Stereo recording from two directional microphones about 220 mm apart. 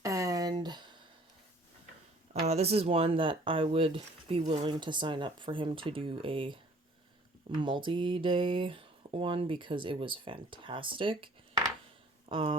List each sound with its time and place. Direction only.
0.0 s a sound: 15° right (ahead or behind)
2.4 s speech: 30° right (ahead or behind)
7.6 s speech: 20° right (ahead or behind)